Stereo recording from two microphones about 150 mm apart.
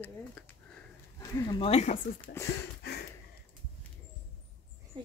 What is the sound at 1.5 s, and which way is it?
Speech, 45° left (ahead or behind).